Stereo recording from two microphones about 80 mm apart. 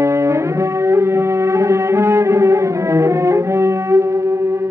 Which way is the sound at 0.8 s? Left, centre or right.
Right.